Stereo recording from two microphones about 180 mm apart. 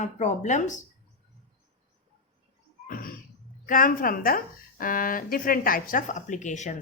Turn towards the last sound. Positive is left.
turn(degrees=40)  # may be behind; listen again after turning